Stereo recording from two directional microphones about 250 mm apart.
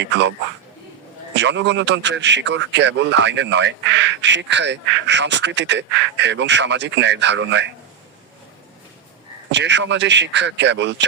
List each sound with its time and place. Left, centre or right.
0.0 s a man's voice: right
1.4 s a man's voice: right
9.5 s a man's voice: right